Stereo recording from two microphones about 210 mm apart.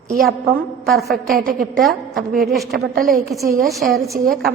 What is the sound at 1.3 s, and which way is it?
Speech, 45° right (ahead or behind).